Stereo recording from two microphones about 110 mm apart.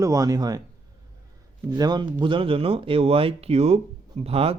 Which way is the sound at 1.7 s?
40° right (ahead or behind).